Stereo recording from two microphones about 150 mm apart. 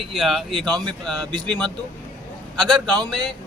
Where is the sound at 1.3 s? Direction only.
30° right (ahead or behind).